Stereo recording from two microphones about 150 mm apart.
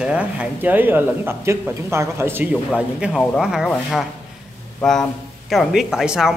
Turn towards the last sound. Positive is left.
turn(degrees=-5)  # may be behind; listen again after turning